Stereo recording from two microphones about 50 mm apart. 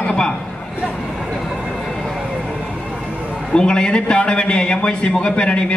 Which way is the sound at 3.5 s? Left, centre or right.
Centre.